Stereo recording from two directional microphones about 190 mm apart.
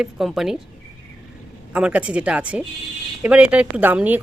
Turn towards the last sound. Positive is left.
turn(degrees=-10)  # may be behind; listen again after turning